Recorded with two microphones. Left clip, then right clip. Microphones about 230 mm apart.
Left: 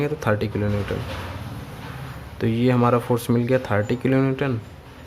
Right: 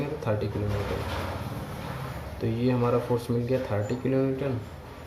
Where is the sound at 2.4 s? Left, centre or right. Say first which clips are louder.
Left 7 dB; left.